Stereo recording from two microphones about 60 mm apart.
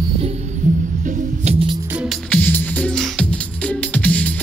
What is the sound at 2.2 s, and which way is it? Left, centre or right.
Music, left.